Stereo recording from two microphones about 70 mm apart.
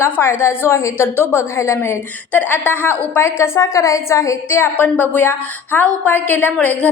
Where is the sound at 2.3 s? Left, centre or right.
Left.